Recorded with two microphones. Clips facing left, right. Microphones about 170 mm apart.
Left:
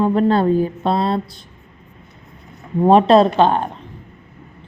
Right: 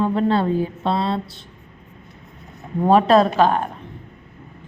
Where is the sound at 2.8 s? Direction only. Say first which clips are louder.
Left 3 dB; 30° left (ahead or behind).